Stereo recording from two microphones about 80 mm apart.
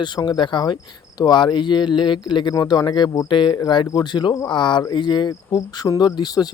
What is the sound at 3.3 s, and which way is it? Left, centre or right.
Speech, left.